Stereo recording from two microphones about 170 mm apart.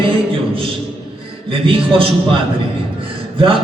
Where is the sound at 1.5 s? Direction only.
30° right (ahead or behind).